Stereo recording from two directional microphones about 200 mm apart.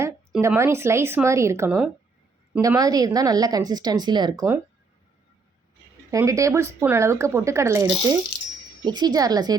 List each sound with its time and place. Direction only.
0.0 s a woman's voice: 10° right (ahead or behind)
6.1 s a woman's voice: 15° right (ahead or behind)